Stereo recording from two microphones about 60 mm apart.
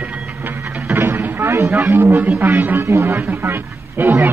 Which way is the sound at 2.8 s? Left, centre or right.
Right.